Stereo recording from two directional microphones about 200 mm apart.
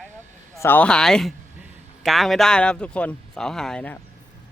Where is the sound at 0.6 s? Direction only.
10° left (ahead or behind).